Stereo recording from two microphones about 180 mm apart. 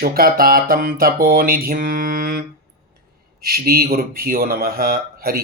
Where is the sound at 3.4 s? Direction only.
55° right (ahead or behind).